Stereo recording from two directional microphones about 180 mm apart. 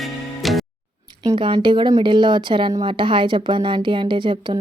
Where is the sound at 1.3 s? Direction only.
30° right (ahead or behind).